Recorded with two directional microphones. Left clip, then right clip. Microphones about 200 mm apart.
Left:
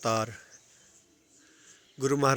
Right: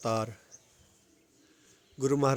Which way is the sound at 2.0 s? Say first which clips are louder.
Left 2 dB; 5° right (ahead or behind).